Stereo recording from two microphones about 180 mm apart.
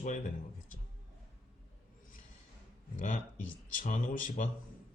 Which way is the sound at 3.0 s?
45° left (ahead or behind).